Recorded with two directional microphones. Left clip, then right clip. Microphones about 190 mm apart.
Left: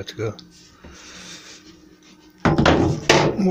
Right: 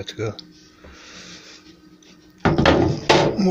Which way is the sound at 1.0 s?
Centre (ahead or behind).